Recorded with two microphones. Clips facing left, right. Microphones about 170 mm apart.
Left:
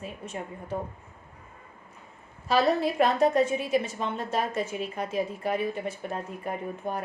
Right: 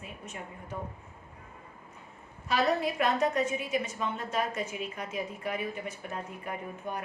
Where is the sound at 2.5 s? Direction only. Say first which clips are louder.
Left 4 dB; 30° left (ahead or behind).